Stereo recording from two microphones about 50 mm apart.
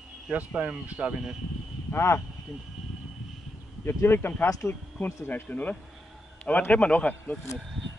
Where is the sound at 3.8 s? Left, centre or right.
Left.